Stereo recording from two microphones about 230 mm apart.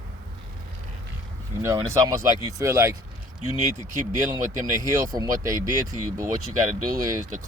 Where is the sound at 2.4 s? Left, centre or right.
Centre.